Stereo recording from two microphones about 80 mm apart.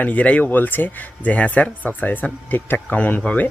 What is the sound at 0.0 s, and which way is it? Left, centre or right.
Speech, centre.